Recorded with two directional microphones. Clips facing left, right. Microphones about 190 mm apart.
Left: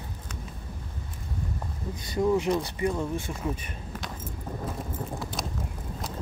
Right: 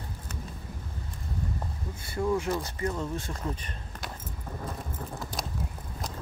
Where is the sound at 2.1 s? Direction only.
15° left (ahead or behind).